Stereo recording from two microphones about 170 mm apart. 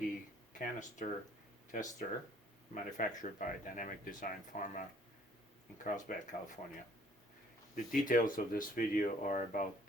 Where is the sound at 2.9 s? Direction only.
45° left (ahead or behind).